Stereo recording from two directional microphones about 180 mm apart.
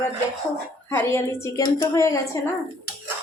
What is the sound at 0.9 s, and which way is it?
Speech, 15° left (ahead or behind).